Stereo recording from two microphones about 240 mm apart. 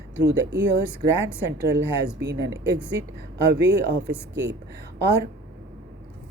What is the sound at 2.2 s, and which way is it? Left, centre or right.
Speech, right.